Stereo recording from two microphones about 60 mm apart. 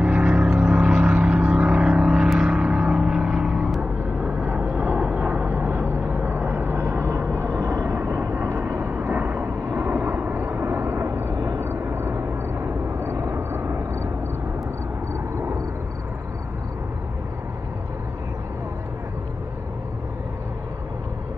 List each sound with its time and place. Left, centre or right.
0.0 s vehicle: centre
2.0 s vehicle: centre
2.5 s music: centre
4.5 s vehicle: right
6.8 s vehicle: right
9.1 s vehicle: right
9.4 s vehicle: right
9.8 s vehicle: right
11.3 s a sound: right
11.6 s vehicle: right